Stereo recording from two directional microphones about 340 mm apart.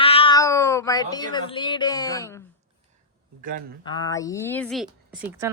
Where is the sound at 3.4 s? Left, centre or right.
Right.